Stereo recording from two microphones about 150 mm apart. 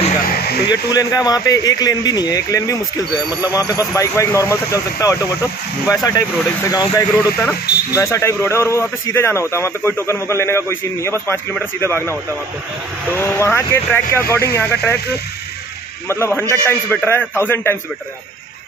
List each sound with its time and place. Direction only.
0.3 s a sound: 90° left
0.7 s speech: 25° left (ahead or behind)
16.1 s speech: 15° left (ahead or behind)